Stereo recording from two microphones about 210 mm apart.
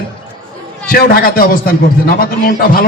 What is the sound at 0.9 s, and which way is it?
A man's voice, 45° left (ahead or behind).